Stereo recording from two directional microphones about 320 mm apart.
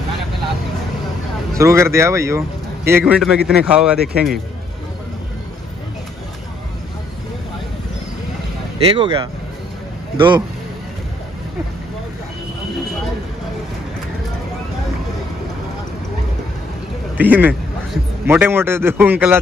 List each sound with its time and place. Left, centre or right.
1.6 s a man's voice: centre
8.8 s a man's voice: centre
17.2 s a man's voice: centre